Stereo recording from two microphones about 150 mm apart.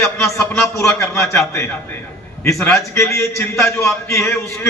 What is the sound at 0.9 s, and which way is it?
Speech, 20° left (ahead or behind).